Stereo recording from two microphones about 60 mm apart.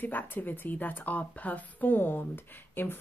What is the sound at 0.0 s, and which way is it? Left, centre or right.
A woman's voice, left.